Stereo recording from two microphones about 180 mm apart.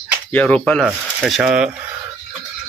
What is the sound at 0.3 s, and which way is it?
Speech, 5° left (ahead or behind).